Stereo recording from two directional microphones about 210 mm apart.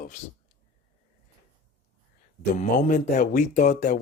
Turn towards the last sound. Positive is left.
turn(degrees=35)  # may be behind; listen again after turning